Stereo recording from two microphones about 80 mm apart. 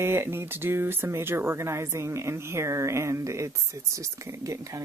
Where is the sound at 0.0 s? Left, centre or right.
Right.